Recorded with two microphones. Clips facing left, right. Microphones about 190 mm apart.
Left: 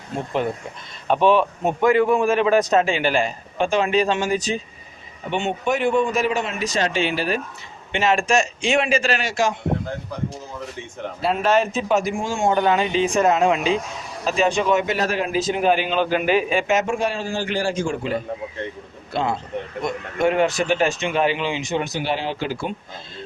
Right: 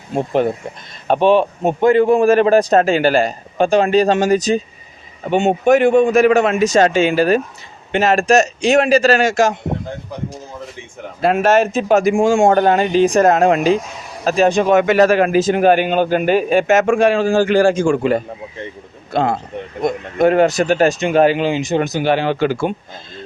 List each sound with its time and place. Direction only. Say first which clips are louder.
1.0 s a man's voice: right 4 dB; 35° right (ahead or behind)
11.2 s speech: right 6 dB; 75° right (ahead or behind)
11.8 s a man's voice: right 8 dB; 65° right (ahead or behind)
12.3 s a man's voice: right 7 dB; 90° right
12.5 s a man's voice: right 6 dB; 50° right (ahead or behind)
14.8 s a man's voice: right 10 dB; 80° right
17.3 s a man's voice: right 10 dB; 45° right (ahead or behind)
17.9 s a man's voice: right 8 dB; 60° right (ahead or behind)
19.1 s a man's voice: right 5 dB; 45° right (ahead or behind)
22.1 s a man's voice: right 10 dB; 65° right (ahead or behind)